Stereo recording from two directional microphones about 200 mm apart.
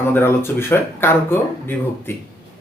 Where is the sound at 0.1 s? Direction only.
10° left (ahead or behind).